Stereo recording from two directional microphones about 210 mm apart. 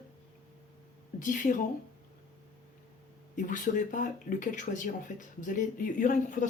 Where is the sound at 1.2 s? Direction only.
40° left (ahead or behind).